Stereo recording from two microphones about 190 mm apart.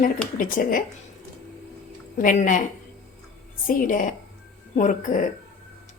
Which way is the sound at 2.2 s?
45° left (ahead or behind).